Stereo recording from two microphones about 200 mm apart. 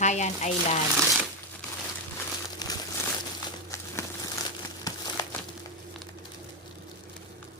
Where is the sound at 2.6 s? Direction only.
20° left (ahead or behind).